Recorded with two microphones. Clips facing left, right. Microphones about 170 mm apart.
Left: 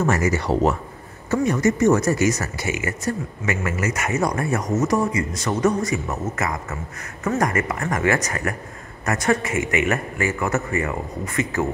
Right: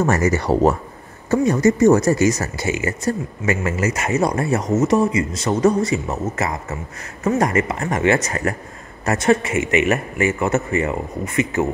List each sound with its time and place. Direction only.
0.0 s speech: 40° right (ahead or behind); by 11.6 s 20° right (ahead or behind)